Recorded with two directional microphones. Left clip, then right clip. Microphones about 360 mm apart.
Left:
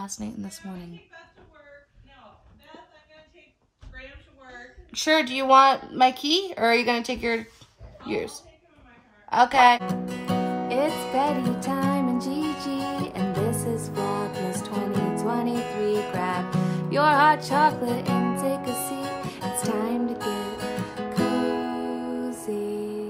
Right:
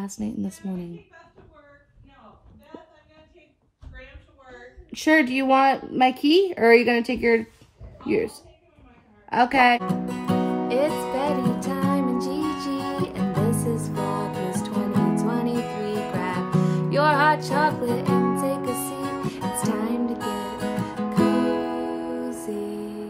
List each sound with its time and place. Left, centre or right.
0.2 s speech: left
5.0 s speech: left
9.8 s music: centre
22.2 s music: centre